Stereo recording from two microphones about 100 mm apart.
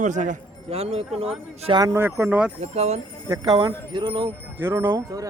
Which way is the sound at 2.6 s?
90° right.